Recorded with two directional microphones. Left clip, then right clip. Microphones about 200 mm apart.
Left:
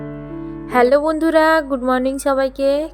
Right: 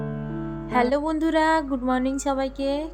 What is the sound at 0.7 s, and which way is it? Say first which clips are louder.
Speech: left 9 dB; 30° left (ahead or behind).